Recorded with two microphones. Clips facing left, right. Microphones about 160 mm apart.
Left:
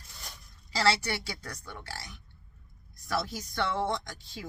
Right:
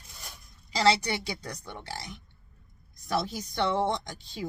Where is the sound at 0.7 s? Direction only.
20° right (ahead or behind).